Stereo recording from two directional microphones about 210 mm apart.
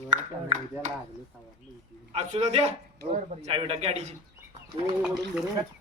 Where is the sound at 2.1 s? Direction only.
30° right (ahead or behind).